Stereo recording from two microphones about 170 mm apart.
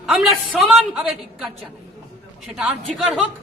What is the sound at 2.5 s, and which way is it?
Speech, 5° right (ahead or behind).